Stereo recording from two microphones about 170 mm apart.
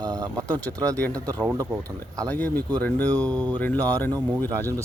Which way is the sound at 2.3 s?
10° left (ahead or behind).